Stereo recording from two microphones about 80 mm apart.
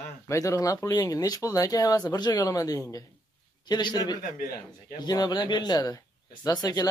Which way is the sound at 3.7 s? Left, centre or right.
Left.